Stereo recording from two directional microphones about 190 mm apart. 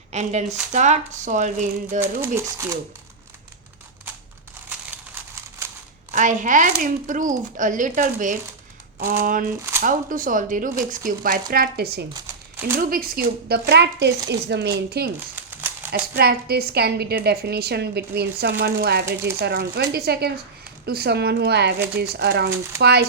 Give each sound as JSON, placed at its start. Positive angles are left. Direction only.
{"t": 0.1, "sound": "speech", "side_deg": -35}
{"t": 2.0, "sound": "speech", "side_deg": -15}
{"t": 5.3, "sound": "a sound", "side_deg": -15}
{"t": 6.1, "sound": "a woman's voice", "side_deg": -40}
{"t": 12.1, "sound": "crumpling", "side_deg": -10}
{"t": 12.7, "sound": "a woman's voice", "side_deg": -50}
{"t": 15.4, "sound": "crumpling", "side_deg": -10}
{"t": 15.9, "sound": "a woman's voice", "side_deg": -55}